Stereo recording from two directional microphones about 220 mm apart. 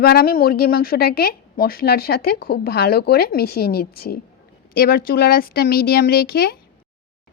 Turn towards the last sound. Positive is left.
turn(degrees=40)  # may be behind; listen again after turning